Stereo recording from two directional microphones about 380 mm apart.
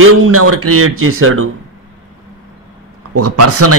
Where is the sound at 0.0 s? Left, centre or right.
Right.